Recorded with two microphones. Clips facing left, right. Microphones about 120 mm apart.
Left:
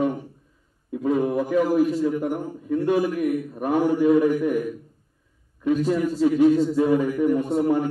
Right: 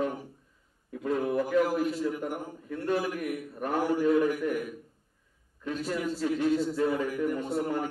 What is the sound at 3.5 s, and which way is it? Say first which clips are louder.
A man's voice: left 4 dB; 15° left (ahead or behind).